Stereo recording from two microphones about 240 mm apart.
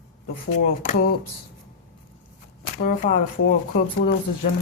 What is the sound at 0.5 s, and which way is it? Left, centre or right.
Speech, left.